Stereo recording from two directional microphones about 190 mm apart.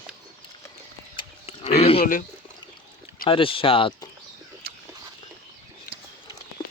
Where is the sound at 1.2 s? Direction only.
35° left (ahead or behind).